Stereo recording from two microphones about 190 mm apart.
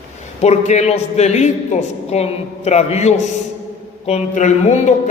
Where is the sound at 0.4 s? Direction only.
35° left (ahead or behind).